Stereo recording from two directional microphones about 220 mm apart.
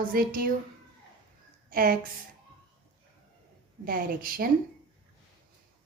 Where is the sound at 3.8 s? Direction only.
40° right (ahead or behind).